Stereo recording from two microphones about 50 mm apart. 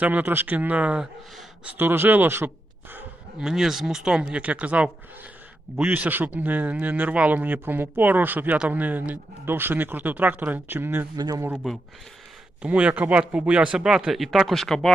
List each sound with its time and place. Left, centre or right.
0.0 s speech: right
1.8 s speech: right
3.3 s speech: centre
4.3 s speech: right
6.0 s speech: right
12.6 s speech: right
14.1 s speech: centre